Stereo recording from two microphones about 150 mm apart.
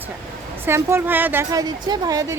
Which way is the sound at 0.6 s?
15° right (ahead or behind).